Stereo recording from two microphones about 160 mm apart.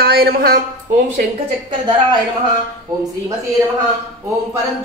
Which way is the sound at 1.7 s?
30° right (ahead or behind).